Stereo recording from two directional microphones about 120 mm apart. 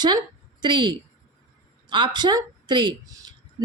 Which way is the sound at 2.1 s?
40° right (ahead or behind).